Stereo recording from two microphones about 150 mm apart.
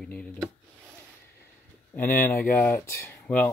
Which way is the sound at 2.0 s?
15° left (ahead or behind).